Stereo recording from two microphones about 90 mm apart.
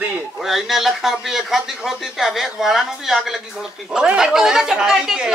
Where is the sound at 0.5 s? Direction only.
5° right (ahead or behind).